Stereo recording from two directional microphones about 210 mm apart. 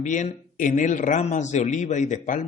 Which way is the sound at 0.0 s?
35° left (ahead or behind).